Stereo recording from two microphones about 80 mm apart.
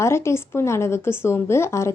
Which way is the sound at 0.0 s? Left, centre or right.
Left.